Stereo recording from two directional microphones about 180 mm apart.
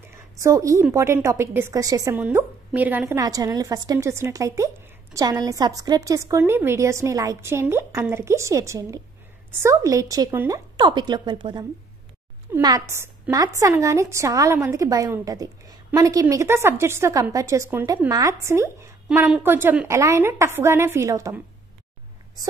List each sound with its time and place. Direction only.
0.4 s a woman's voice: 15° right (ahead or behind)
12.6 s a woman's voice: 20° right (ahead or behind)